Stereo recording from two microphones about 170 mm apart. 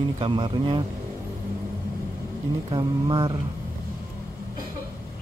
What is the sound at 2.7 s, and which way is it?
Speech, 30° right (ahead or behind).